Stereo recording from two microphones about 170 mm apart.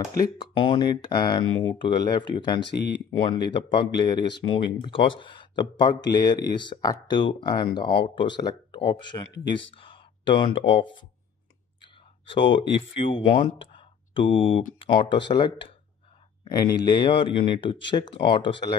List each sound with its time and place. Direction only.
0.2 s speech: 25° left (ahead or behind)
2.7 s speech: 80° left
3.1 s speech: 30° left (ahead or behind)
12.4 s speech: 90° left
12.9 s speech: 30° left (ahead or behind)